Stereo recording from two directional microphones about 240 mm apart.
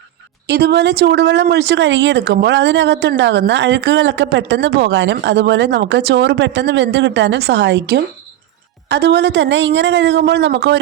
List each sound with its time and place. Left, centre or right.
0.4 s speech: right